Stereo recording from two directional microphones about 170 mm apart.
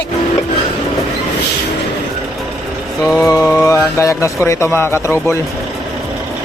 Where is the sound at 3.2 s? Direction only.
20° left (ahead or behind).